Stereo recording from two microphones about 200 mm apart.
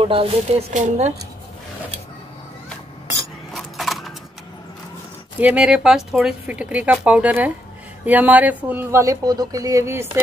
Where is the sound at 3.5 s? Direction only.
Centre (ahead or behind).